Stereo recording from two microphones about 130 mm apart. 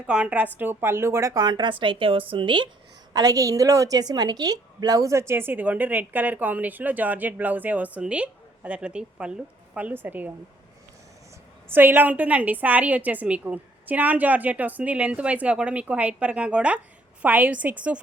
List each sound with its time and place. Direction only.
0.1 s a woman's voice: 10° right (ahead or behind)
11.7 s a woman's voice: 15° right (ahead or behind)